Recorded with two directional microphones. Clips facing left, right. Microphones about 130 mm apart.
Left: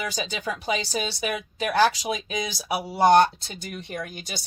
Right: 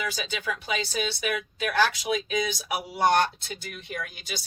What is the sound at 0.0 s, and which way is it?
Speech, 40° left (ahead or behind).